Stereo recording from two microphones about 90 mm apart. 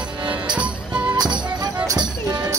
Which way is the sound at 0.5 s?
15° right (ahead or behind).